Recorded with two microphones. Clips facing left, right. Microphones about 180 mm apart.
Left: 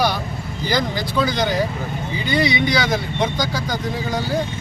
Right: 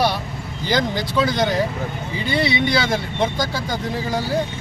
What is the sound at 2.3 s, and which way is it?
Speech, 30° right (ahead or behind).